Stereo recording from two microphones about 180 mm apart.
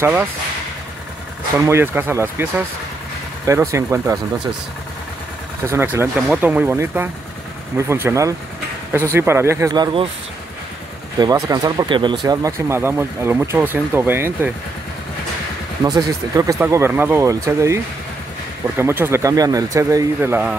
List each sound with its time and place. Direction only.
0.0 s speech: 10° right (ahead or behind)
1.6 s speech: 15° right (ahead or behind)
5.7 s speech: 15° right (ahead or behind)
11.1 s speech: 20° right (ahead or behind)
15.8 s speech: 20° right (ahead or behind)
18.8 s speech: 15° right (ahead or behind)